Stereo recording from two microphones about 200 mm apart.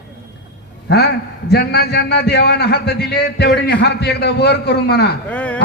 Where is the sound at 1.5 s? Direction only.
55° left (ahead or behind).